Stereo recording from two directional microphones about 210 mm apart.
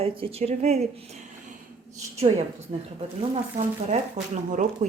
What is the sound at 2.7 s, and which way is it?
Speech, 30° right (ahead or behind).